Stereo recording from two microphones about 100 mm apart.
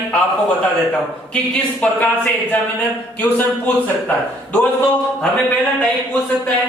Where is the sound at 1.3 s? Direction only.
15° left (ahead or behind).